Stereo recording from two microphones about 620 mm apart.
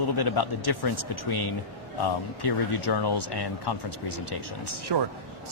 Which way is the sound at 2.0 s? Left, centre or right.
Left.